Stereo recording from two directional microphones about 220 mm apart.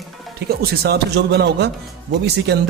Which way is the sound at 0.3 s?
45° right (ahead or behind).